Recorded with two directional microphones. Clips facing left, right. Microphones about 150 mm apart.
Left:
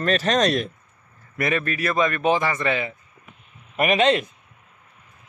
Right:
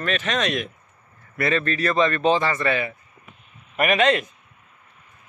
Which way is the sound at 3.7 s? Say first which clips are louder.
Left 1 dB; 30° left (ahead or behind).